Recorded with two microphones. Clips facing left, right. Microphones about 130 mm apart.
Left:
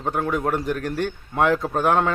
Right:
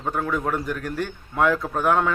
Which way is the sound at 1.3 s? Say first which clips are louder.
Left 1 dB; 25° left (ahead or behind).